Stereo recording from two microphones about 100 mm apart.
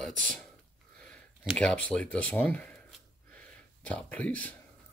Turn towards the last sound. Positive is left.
turn(degrees=15)  # may be behind; listen again after turning